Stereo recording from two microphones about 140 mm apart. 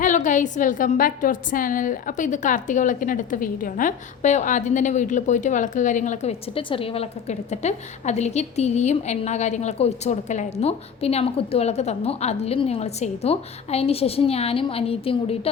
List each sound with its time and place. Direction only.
0.0 s a woman's voice: 65° left (ahead or behind)
6.5 s a woman's voice: 40° left (ahead or behind)